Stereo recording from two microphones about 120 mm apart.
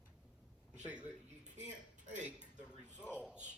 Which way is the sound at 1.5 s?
85° right.